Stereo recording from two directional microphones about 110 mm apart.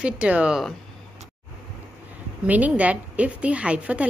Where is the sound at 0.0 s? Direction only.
10° right (ahead or behind).